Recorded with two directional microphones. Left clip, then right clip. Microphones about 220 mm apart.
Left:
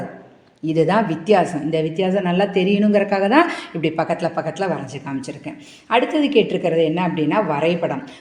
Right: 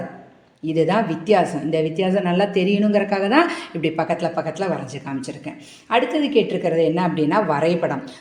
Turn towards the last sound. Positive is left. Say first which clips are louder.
# even
turn(degrees=0)  # may be behind; listen again after turning